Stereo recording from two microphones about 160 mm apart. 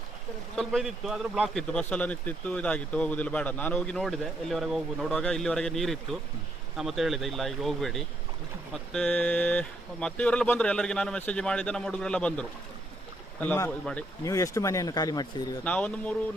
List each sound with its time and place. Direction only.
0.5 s a man's voice: centre (ahead or behind); by 15.3 s 25° left (ahead or behind)
15.6 s speech: 10° left (ahead or behind)